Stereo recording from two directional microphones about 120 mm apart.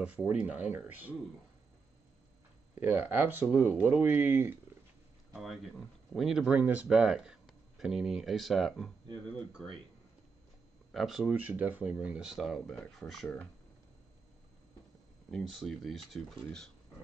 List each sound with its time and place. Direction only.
0.0 s speech: 15° right (ahead or behind)
2.7 s speech: 15° right (ahead or behind)
5.3 s speech: centre (ahead or behind)
10.9 s speech: centre (ahead or behind)
11.3 s speech: 15° right (ahead or behind)
12.4 s speech: centre (ahead or behind)
15.3 s speech: centre (ahead or behind)